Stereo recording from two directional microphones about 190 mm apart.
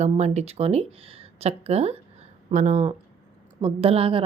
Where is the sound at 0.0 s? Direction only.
35° right (ahead or behind).